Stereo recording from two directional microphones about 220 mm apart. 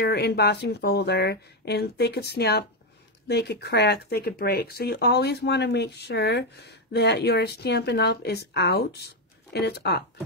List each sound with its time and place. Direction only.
0.0 s speech: 50° left (ahead or behind)